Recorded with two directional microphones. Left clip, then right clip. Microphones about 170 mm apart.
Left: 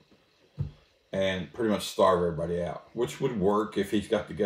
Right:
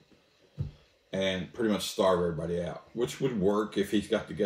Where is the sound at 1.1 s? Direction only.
15° left (ahead or behind).